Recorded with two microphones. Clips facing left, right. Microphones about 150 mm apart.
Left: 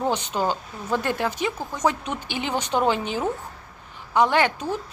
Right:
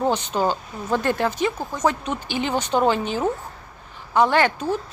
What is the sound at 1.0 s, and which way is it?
A woman's voice, 10° left (ahead or behind).